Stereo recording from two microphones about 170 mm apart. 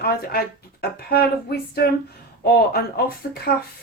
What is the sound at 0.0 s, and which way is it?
Speech, 65° left (ahead or behind).